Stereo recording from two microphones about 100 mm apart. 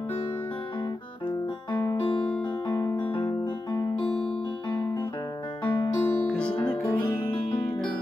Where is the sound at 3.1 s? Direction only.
55° left (ahead or behind).